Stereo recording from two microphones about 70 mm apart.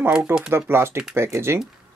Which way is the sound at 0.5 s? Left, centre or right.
Right.